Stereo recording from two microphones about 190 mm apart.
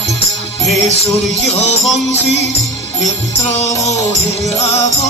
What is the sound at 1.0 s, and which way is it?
Music, 35° left (ahead or behind).